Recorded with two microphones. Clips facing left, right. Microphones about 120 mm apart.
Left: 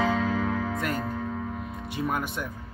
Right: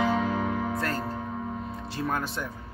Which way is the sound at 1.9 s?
15° left (ahead or behind).